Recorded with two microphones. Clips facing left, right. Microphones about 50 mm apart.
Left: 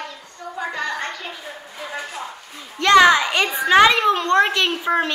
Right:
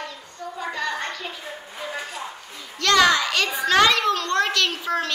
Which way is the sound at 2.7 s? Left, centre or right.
Left.